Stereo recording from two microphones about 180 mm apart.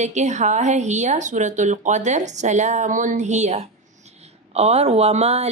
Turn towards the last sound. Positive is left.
turn(degrees=-35)  # may be behind; listen again after turning